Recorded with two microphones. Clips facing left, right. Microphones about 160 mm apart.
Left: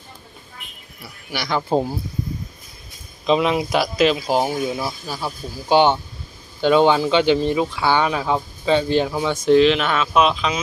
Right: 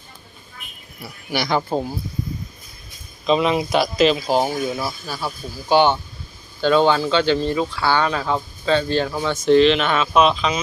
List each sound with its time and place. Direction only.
1.4 s speech: 10° right (ahead or behind)
1.7 s speech: 30° left (ahead or behind)
3.2 s speech: 10° left (ahead or behind)